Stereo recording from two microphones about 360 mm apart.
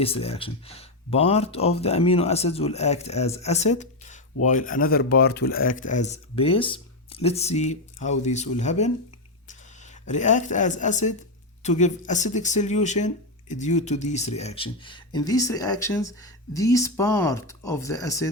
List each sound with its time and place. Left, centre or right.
0.0 s speech: centre